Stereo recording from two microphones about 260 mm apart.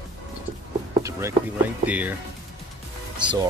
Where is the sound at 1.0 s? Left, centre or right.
Centre.